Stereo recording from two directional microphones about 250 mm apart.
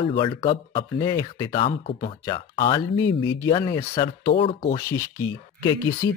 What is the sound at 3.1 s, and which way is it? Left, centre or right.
Speech, left.